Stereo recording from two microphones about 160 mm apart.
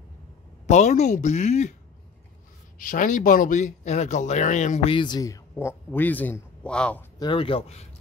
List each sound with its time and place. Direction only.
0.7 s speech: 45° left (ahead or behind)
2.8 s speech: 60° left (ahead or behind)
4.9 s a man's voice: 25° left (ahead or behind); by 7.1 s 5° left (ahead or behind)
7.2 s speech: 30° left (ahead or behind)